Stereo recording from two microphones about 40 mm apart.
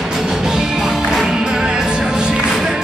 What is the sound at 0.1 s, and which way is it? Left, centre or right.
Music, centre.